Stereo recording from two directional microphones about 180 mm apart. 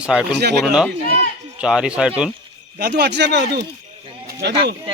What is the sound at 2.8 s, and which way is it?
Speech, 65° right (ahead or behind).